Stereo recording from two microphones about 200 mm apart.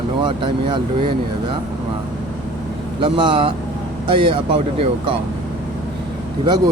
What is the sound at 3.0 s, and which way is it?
Speech, 25° right (ahead or behind).